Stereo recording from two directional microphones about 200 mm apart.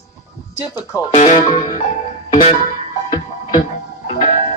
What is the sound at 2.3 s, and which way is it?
Music, 35° left (ahead or behind).